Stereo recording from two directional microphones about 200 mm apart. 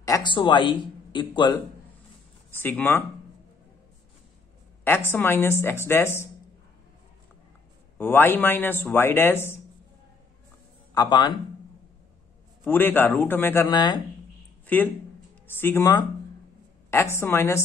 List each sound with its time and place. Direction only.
0.0 s speech: 20° left (ahead or behind)
2.6 s speech: 10° left (ahead or behind)
5.1 s speech: 10° left (ahead or behind)
8.0 s speech: 10° left (ahead or behind)
11.0 s speech: 20° left (ahead or behind)
12.6 s speech: 10° left (ahead or behind)
15.4 s speech: 10° left (ahead or behind)